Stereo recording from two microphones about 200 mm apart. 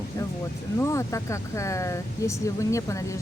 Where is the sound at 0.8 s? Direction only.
15° left (ahead or behind).